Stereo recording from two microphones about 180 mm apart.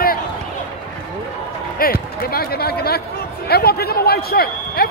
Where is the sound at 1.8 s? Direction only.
55° left (ahead or behind).